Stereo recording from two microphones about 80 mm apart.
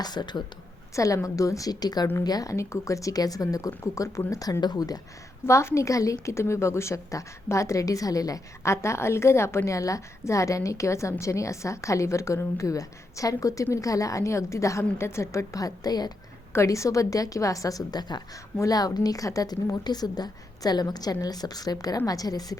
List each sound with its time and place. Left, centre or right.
0.0 s speech: left
0.9 s a woman's voice: left
4.6 s speech: left
5.5 s a woman's voice: left
8.7 s a woman's voice: left
16.5 s a woman's voice: left
19.8 s a woman's voice: left